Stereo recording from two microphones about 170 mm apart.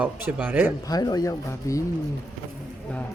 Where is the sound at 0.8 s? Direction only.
20° left (ahead or behind).